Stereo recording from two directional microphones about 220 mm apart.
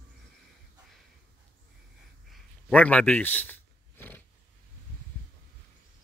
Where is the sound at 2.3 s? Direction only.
5° left (ahead or behind).